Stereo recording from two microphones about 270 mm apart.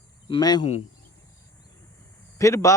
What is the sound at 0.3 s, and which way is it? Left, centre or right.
Speech, centre.